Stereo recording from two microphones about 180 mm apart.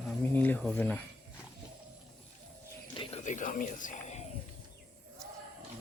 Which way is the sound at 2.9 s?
35° left (ahead or behind).